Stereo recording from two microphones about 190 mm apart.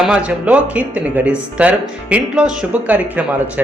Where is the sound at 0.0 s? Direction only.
5° right (ahead or behind).